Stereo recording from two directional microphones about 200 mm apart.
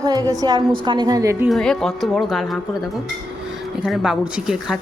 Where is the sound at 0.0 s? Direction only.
20° right (ahead or behind).